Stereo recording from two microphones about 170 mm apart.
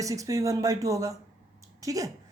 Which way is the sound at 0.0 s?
20° right (ahead or behind).